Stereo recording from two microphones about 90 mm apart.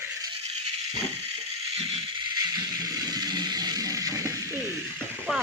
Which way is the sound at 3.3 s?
50° right (ahead or behind).